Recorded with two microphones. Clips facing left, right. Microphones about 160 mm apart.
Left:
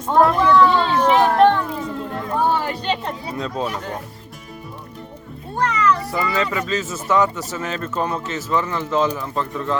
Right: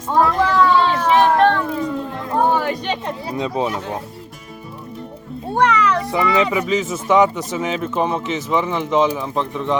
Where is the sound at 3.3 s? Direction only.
15° right (ahead or behind).